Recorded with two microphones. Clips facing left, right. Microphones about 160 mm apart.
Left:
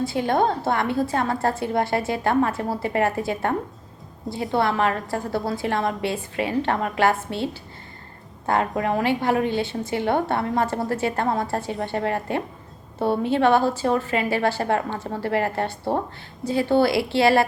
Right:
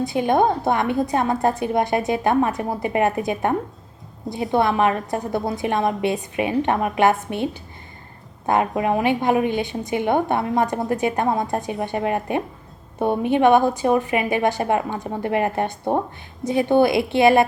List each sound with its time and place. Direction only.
0.0 s a woman's voice: 20° right (ahead or behind)
4.5 s a woman's voice: 20° right (ahead or behind)